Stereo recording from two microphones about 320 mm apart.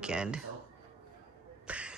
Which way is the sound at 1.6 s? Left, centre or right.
Centre.